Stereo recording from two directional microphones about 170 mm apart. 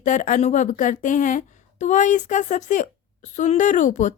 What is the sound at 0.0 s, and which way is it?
A woman's voice, 50° left (ahead or behind).